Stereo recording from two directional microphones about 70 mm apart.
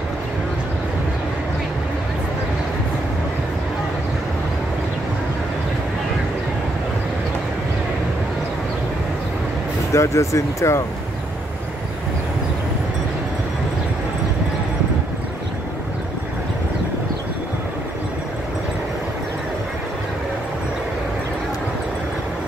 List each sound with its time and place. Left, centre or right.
9.9 s speech: left